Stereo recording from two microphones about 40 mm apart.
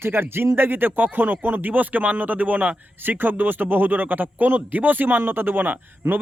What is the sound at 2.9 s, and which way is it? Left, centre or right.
A man's voice, right.